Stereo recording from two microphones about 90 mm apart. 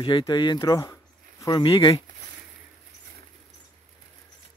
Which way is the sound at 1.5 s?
65° left (ahead or behind).